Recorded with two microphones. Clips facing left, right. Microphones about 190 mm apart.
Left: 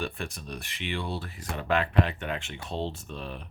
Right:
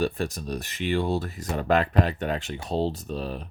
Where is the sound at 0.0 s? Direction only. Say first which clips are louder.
Right 8 dB; 40° right (ahead or behind).